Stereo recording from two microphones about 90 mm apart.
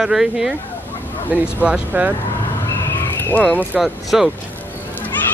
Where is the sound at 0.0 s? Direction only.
5° right (ahead or behind).